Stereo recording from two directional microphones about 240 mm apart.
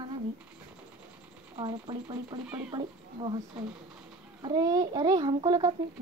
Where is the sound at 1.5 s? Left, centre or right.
Centre.